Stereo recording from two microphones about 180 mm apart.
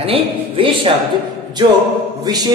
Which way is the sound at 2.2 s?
20° right (ahead or behind).